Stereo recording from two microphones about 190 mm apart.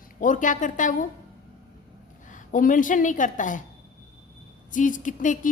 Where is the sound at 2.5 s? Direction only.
45° left (ahead or behind).